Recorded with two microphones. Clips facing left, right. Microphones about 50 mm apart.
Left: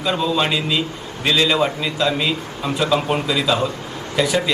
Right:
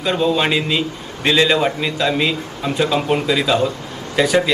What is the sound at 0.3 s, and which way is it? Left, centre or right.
A man's voice, right.